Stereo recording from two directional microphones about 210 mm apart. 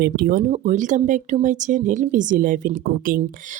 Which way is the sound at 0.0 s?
40° right (ahead or behind).